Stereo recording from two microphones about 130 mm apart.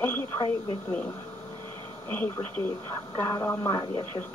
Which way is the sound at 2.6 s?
20° left (ahead or behind).